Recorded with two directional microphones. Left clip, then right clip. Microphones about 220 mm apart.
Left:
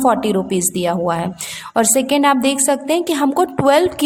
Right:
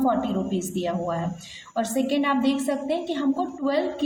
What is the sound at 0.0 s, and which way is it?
A woman's voice, 40° left (ahead or behind).